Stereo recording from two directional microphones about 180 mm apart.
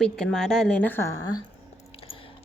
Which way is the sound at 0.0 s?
5° left (ahead or behind).